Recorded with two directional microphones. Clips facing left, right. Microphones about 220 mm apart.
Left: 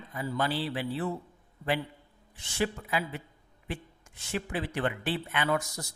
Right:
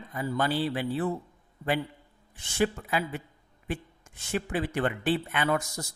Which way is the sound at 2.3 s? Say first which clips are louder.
Right 4 dB; 45° right (ahead or behind).